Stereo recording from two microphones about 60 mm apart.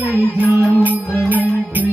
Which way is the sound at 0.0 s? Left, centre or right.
Right.